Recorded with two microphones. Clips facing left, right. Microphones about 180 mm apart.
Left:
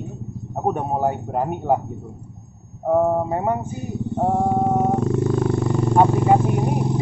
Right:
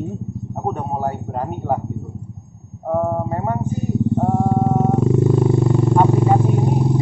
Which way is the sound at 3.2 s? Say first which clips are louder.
Left 1 dB; 15° left (ahead or behind).